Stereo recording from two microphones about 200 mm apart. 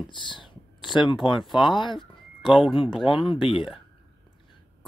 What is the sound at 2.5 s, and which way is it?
Speech, centre (ahead or behind).